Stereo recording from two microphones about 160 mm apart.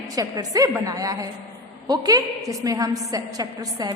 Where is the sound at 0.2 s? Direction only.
20° right (ahead or behind).